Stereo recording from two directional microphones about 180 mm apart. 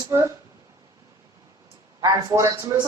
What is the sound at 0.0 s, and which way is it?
Speech, 15° right (ahead or behind).